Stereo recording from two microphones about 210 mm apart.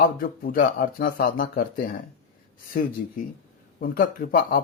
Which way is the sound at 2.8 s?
45° left (ahead or behind).